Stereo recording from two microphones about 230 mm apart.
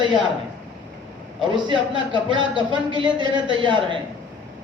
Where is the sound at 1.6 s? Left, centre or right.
Right.